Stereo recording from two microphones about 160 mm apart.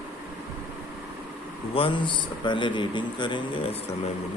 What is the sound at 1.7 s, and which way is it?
Speech, 35° left (ahead or behind).